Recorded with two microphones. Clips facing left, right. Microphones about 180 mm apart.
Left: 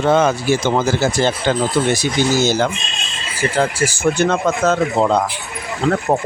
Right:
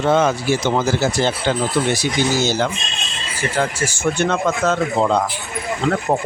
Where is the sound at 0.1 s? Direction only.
50° left (ahead or behind).